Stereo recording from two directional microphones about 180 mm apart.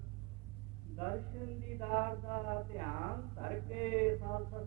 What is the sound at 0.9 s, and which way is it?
A woman's voice, 35° left (ahead or behind).